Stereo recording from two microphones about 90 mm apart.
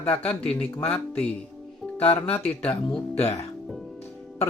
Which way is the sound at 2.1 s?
90° left.